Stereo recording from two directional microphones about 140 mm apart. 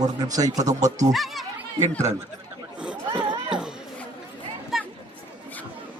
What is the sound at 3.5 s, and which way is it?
Chatter, 5° right (ahead or behind).